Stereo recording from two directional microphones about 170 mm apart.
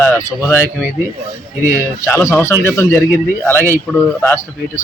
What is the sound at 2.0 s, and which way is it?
Speech, 15° left (ahead or behind).